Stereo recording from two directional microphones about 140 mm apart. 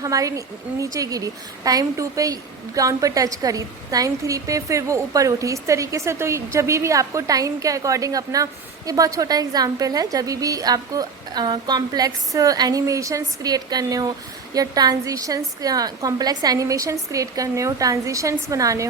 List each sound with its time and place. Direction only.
0.0 s a woman's voice: 25° right (ahead or behind)